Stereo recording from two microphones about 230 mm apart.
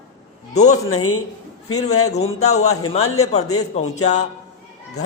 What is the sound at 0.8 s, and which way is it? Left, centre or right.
Speech, left.